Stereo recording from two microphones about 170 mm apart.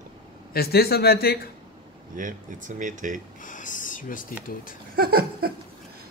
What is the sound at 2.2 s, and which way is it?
A man's voice, 50° right (ahead or behind).